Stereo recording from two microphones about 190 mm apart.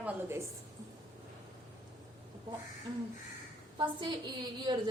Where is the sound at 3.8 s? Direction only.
25° right (ahead or behind).